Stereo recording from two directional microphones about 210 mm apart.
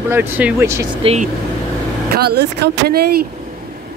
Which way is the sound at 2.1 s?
50° right (ahead or behind).